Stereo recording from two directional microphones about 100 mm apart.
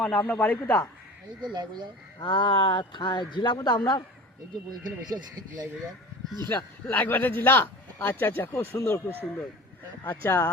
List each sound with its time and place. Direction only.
0.0 s a man's voice: 15° left (ahead or behind)
1.5 s speech: 50° right (ahead or behind)
2.2 s a man's voice: 50° left (ahead or behind)
4.8 s speech: 45° right (ahead or behind)
6.5 s a man's voice: 15° left (ahead or behind)
9.2 s a man's voice: 10° left (ahead or behind)